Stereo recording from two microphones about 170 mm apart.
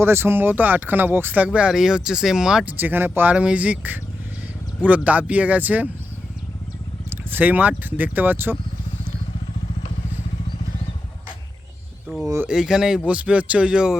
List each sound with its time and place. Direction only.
0.0 s speech: 15° right (ahead or behind)
7.1 s speech: 10° right (ahead or behind)
12.0 s a sound: 5° right (ahead or behind)
12.5 s speech: 5° right (ahead or behind)